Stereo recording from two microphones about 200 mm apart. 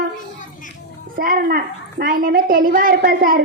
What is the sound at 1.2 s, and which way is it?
A woman's voice, 45° right (ahead or behind).